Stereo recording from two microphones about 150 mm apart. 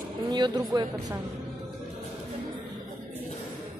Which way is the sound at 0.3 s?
25° right (ahead or behind).